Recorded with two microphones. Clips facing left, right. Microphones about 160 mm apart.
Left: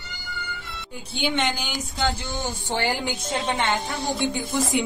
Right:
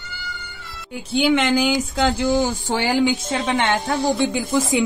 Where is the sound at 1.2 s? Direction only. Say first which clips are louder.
Right 8 dB; 85° right.